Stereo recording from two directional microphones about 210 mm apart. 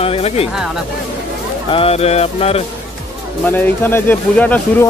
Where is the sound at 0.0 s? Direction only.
30° left (ahead or behind).